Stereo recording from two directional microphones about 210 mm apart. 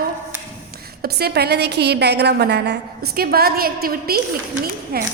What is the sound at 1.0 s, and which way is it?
A woman's voice, 50° right (ahead or behind).